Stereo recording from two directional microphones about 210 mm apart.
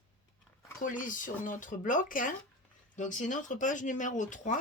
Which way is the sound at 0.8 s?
40° left (ahead or behind).